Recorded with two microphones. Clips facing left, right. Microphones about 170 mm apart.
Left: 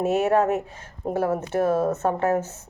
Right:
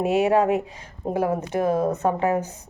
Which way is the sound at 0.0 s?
15° right (ahead or behind).